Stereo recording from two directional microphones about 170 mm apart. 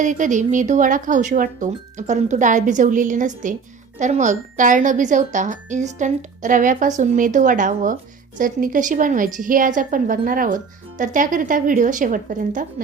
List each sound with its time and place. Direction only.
0.0 s a woman's voice: 50° right (ahead or behind)